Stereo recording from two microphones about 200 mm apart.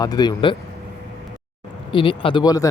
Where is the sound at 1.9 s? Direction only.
25° left (ahead or behind).